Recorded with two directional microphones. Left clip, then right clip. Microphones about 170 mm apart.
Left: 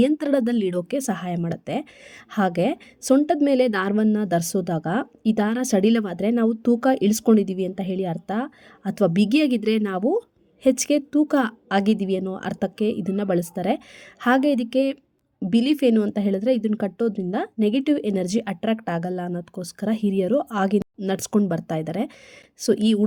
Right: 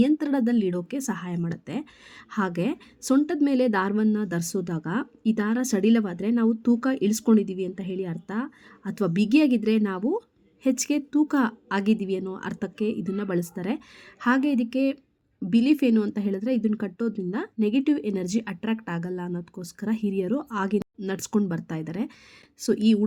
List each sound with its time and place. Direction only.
0.0 s a woman's voice: 20° left (ahead or behind)